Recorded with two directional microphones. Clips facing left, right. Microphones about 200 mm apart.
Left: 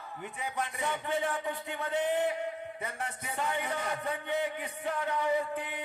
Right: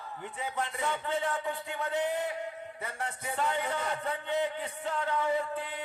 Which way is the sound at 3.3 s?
15° left (ahead or behind).